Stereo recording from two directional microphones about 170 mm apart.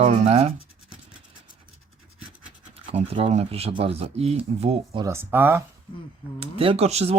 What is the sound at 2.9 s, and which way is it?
Speech, 35° right (ahead or behind).